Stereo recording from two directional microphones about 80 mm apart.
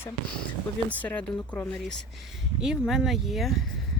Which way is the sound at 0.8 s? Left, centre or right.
Centre.